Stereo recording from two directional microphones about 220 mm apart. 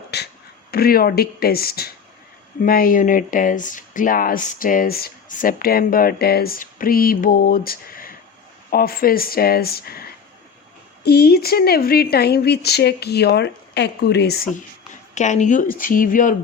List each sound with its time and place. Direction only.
0.1 s a sound: 50° left (ahead or behind)
0.7 s speech: 45° left (ahead or behind)
15.1 s speech: 35° left (ahead or behind)